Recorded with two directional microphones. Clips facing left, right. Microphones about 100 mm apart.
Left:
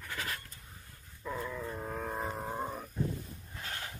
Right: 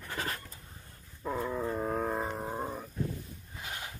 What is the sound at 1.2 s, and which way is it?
Dog, 30° right (ahead or behind).